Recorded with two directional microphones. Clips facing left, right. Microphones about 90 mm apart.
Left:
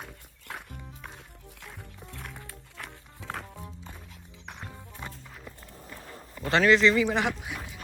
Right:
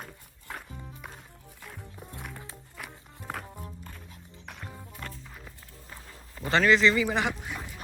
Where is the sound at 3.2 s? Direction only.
90° left.